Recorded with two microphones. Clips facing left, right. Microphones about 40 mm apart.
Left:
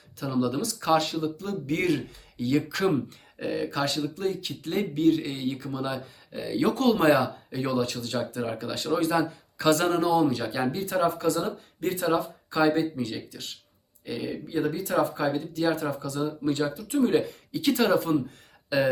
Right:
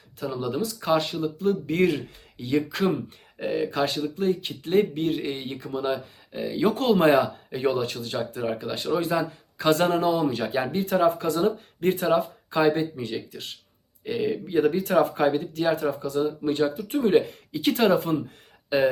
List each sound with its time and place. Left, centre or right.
0.2 s speech: right